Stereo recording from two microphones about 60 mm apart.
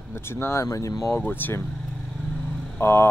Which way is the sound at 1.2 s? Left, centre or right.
Left.